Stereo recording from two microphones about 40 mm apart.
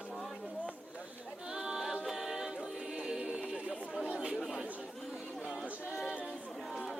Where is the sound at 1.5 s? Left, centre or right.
Centre.